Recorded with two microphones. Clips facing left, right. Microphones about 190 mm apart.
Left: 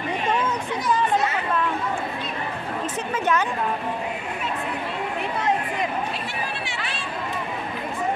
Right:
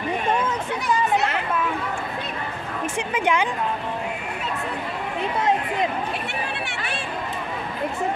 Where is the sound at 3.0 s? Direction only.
15° right (ahead or behind).